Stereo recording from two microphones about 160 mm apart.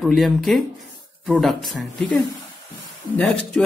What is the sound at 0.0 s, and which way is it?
Speech, centre (ahead or behind).